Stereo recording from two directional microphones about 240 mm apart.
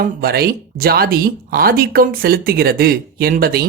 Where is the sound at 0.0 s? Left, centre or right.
Right.